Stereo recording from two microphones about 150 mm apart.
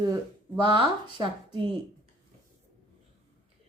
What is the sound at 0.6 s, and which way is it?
Speech, 35° right (ahead or behind).